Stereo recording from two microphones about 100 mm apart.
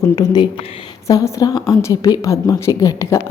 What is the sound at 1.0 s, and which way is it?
A woman's voice, 35° left (ahead or behind).